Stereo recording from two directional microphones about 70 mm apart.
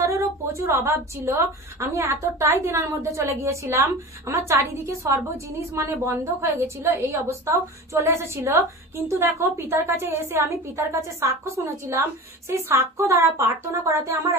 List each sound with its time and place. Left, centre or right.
0.0 s a woman's voice: right